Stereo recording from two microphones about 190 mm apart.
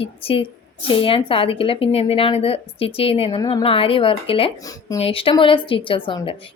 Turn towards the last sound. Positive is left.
turn(degrees=25)  # may be behind; listen again after turning